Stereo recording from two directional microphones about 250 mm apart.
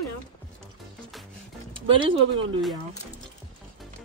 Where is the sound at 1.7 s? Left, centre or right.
Right.